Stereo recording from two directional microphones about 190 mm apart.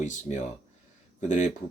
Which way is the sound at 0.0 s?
40° left (ahead or behind).